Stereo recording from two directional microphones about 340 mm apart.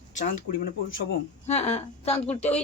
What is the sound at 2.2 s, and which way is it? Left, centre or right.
Speech, centre.